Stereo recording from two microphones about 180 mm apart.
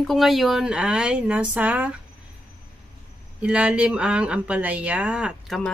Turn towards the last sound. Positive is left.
turn(degrees=-5)  # may be behind; listen again after turning